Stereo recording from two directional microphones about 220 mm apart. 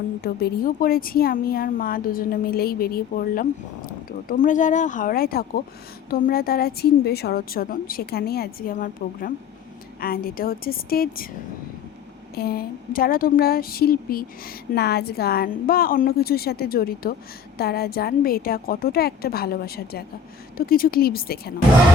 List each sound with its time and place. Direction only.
0.2 s a woman's voice: 45° left (ahead or behind)
12.3 s a woman's voice: 45° left (ahead or behind)